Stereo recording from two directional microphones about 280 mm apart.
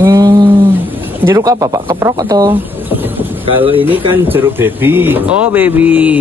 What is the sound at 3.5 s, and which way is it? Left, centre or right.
Speech, centre.